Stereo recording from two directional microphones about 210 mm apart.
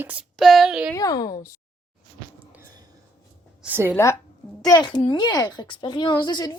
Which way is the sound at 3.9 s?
10° left (ahead or behind).